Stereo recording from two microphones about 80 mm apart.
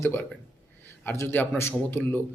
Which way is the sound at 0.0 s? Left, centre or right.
Left.